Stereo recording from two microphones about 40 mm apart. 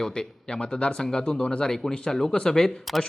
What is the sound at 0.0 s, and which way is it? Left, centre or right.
Speech, left.